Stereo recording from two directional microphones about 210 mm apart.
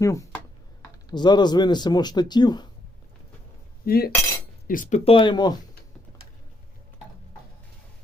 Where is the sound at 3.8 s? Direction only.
45° left (ahead or behind); by 5.6 s 20° left (ahead or behind).